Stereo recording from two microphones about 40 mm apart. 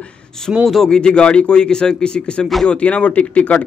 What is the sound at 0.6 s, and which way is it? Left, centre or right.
Speech, centre.